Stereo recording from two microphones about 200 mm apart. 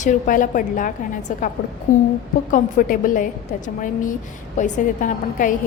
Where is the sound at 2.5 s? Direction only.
40° left (ahead or behind).